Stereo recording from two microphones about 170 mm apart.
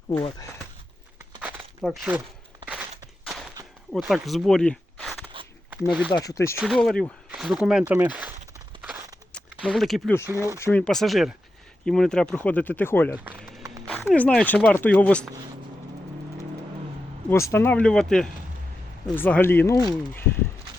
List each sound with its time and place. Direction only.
0.1 s speech: 20° left (ahead or behind)
1.4 s crumpling: 10° right (ahead or behind)
1.8 s speech: 5° right (ahead or behind)
3.9 s speech: centre (ahead or behind)
6.1 s speech: 20° left (ahead or behind)
6.6 s speech: centre (ahead or behind)
9.6 s speech: centre (ahead or behind)
10.2 s speech: 15° right (ahead or behind)
10.6 s speech: 10° left (ahead or behind)
13.3 s a sound: 5° left (ahead or behind)
13.8 s speech: 5° left (ahead or behind)
17.2 s speech: 15° left (ahead or behind)